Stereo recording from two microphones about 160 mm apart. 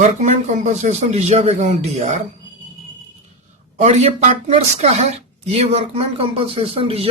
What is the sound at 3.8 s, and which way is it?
A woman's voice, 45° right (ahead or behind).